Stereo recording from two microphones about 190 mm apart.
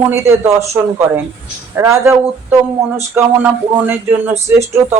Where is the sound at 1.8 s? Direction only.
15° right (ahead or behind).